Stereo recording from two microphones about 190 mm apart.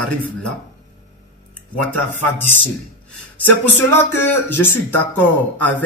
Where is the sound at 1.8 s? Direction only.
10° left (ahead or behind).